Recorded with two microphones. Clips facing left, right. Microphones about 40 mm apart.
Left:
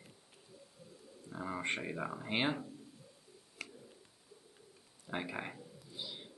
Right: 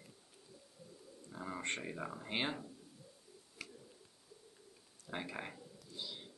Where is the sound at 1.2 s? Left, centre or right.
Centre.